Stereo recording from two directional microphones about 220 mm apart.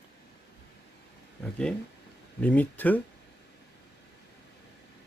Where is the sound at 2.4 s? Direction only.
5° left (ahead or behind).